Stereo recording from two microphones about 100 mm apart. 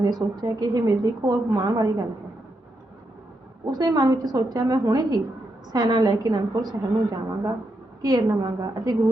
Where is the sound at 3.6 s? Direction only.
40° right (ahead or behind).